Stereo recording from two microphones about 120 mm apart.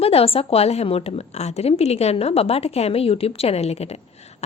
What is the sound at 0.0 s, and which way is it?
A woman's voice, 55° left (ahead or behind).